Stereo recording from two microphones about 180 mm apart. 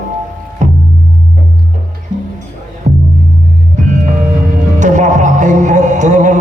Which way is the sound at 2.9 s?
45° right (ahead or behind).